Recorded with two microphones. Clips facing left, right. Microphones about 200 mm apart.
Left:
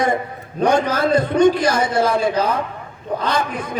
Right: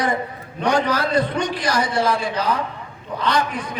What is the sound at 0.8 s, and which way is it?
Speech, 45° left (ahead or behind).